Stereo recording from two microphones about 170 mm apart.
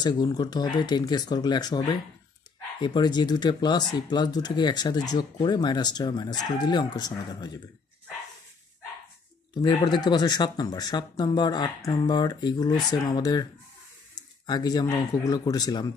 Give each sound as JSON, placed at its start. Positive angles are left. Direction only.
{"t": 0.0, "sound": "speech", "side_deg": 25}
{"t": 9.5, "sound": "speech", "side_deg": 25}